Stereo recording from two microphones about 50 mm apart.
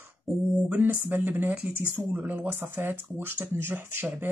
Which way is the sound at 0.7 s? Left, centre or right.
Right.